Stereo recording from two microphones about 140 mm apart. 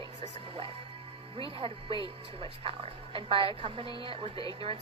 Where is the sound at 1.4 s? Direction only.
40° right (ahead or behind).